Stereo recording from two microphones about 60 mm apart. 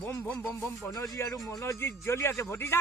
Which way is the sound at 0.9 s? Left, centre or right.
Left.